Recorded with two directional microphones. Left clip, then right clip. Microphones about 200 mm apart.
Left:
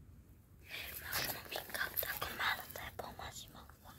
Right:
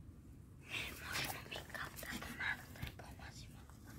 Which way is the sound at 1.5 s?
50° left (ahead or behind).